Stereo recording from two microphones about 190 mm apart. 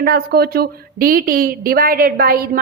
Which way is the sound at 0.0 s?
55° right (ahead or behind).